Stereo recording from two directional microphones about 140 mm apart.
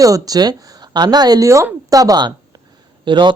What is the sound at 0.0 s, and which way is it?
Speech, 25° right (ahead or behind).